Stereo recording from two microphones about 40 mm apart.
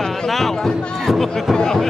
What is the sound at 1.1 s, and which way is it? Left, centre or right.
Speech, centre.